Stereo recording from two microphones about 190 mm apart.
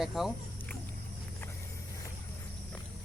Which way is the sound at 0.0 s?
Centre (ahead or behind).